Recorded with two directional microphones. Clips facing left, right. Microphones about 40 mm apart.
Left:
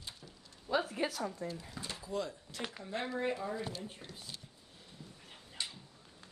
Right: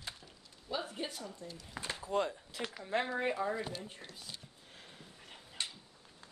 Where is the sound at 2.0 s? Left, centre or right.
Right.